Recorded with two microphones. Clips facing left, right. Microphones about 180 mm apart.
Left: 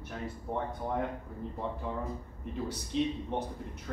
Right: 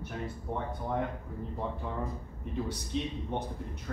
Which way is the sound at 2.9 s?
Centre (ahead or behind).